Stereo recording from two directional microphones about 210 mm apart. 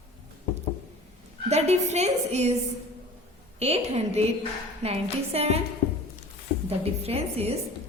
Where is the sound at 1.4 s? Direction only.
30° right (ahead or behind).